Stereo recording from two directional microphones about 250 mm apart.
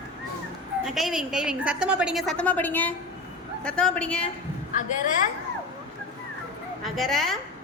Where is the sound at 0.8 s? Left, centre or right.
Centre.